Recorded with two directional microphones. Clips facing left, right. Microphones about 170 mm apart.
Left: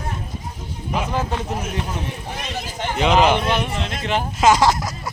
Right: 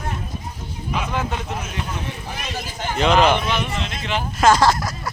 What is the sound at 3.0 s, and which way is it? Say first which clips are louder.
Speech: even; 15° left (ahead or behind).